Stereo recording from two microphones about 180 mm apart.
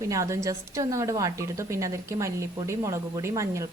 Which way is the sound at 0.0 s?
15° right (ahead or behind).